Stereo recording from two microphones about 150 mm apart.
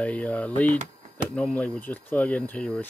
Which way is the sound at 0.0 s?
10° left (ahead or behind).